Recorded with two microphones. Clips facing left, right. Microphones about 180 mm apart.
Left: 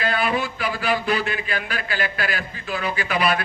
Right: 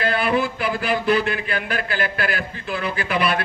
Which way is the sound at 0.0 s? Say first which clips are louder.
Right 3 dB; 55° right (ahead or behind).